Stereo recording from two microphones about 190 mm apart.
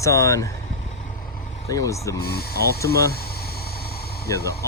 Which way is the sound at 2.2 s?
55° left (ahead or behind).